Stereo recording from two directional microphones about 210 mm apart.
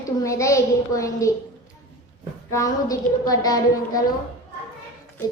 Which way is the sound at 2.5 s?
15° left (ahead or behind).